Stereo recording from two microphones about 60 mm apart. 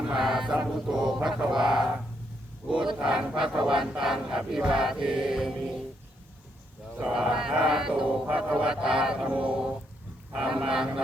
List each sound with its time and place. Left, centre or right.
0.1 s speech: centre
0.5 s battle cry: centre
1.5 s speech: centre
2.6 s battle cry: centre
5.5 s speech: centre
7.0 s battle cry: centre
8.4 s a sound: centre
8.7 s battle cry: centre
9.2 s a sound: right
10.3 s battle cry: centre